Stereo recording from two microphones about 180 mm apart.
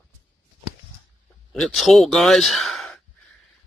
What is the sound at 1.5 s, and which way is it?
Speech, centre (ahead or behind).